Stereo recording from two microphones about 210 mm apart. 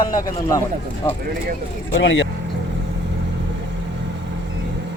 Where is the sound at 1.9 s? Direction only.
60° left (ahead or behind).